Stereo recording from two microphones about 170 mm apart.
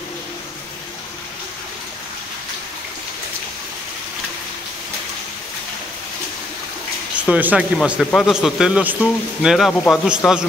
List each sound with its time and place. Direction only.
7.2 s speech: 10° right (ahead or behind)